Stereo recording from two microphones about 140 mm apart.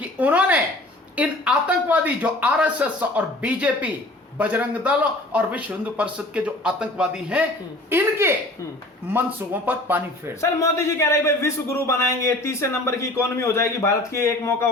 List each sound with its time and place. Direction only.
0.2 s a sound: 10° right (ahead or behind)
1.1 s a man's voice: 10° right (ahead or behind)
10.4 s a man's voice: 20° left (ahead or behind)